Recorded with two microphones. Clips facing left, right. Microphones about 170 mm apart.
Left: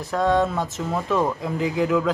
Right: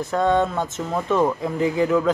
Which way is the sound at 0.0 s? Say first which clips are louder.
Right 1 dB; centre (ahead or behind).